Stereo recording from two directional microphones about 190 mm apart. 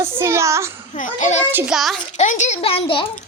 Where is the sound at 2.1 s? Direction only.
40° left (ahead or behind).